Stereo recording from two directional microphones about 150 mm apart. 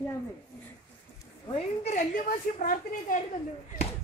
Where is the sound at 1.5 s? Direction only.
45° left (ahead or behind); by 3.1 s 65° left (ahead or behind).